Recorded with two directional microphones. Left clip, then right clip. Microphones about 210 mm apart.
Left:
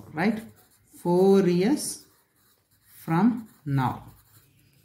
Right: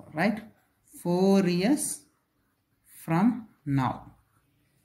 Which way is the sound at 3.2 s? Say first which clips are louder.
Left 2 dB; 5° right (ahead or behind).